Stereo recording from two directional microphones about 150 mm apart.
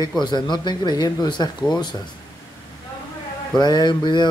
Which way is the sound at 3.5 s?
30° left (ahead or behind).